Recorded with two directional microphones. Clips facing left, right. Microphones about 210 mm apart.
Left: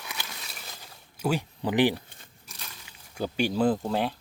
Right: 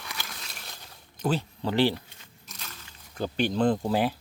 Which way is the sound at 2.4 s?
10° left (ahead or behind).